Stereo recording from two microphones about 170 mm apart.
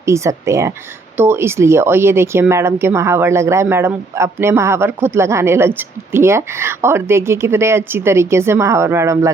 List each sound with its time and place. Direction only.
0.0 s speech: 15° right (ahead or behind)